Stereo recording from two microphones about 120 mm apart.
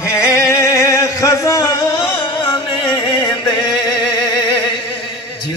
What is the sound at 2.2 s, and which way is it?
Music, 35° left (ahead or behind).